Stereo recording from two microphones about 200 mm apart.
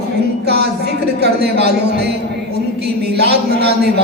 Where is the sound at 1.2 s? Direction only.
55° right (ahead or behind).